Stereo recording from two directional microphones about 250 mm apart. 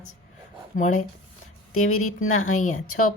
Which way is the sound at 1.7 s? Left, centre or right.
Left.